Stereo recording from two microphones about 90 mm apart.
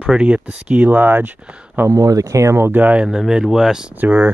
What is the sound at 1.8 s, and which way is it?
Speech, 40° right (ahead or behind).